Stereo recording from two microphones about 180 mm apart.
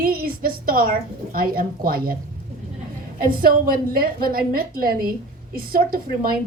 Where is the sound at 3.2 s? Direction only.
55° right (ahead or behind).